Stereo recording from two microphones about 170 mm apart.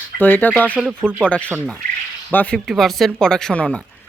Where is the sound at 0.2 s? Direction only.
10° left (ahead or behind).